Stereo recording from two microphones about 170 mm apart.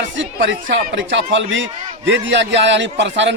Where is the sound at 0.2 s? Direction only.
90° right.